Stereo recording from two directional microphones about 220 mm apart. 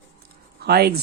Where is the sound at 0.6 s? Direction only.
45° right (ahead or behind).